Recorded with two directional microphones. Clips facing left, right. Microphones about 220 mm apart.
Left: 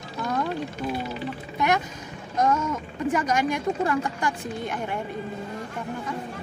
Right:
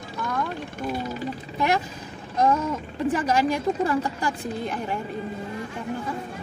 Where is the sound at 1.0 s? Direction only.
35° right (ahead or behind).